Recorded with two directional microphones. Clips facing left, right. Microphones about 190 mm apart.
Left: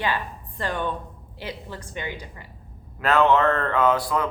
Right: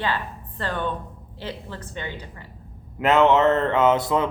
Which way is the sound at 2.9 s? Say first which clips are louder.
Right 2 dB; 20° right (ahead or behind).